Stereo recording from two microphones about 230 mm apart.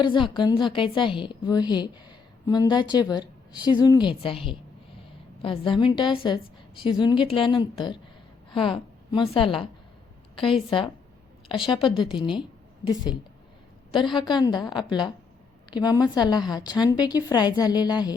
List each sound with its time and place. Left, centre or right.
0.0 s a woman's voice: left
10.7 s a woman's voice: left
12.4 s a sound: centre
13.9 s a woman's voice: left